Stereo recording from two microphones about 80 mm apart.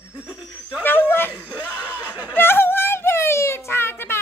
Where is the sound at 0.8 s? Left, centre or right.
Left.